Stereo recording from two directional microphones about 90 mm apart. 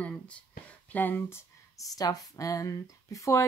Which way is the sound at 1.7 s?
45° left (ahead or behind).